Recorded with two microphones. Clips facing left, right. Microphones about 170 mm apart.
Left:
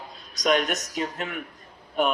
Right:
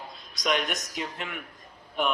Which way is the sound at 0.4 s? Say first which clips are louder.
Left 5 dB; 45° left (ahead or behind).